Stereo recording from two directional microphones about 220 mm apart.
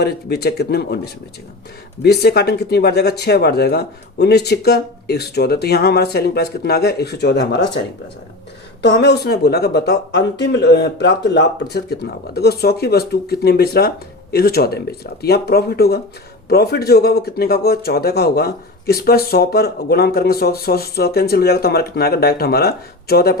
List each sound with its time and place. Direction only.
0.0 s speech: 45° left (ahead or behind)
8.8 s speech: 50° left (ahead or behind)